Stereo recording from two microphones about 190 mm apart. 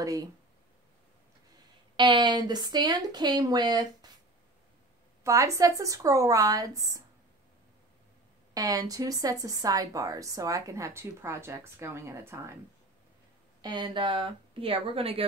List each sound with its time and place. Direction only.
0.0 s speech: 20° right (ahead or behind)
2.0 s speech: 25° right (ahead or behind)
5.2 s speech: 15° right (ahead or behind)
8.5 s speech: 20° right (ahead or behind)
13.6 s speech: 25° right (ahead or behind)